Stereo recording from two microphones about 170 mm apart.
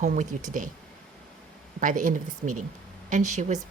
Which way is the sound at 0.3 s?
45° right (ahead or behind).